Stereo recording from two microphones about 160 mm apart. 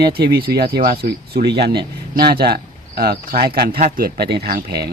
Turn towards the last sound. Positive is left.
turn(degrees=-70)  # may be behind; listen again after turning